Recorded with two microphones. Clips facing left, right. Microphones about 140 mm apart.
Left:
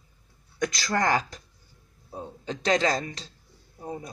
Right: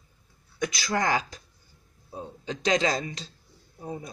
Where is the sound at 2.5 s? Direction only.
15° right (ahead or behind).